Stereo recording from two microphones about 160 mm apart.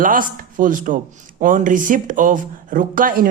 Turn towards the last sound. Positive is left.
turn(degrees=-60)  # may be behind; listen again after turning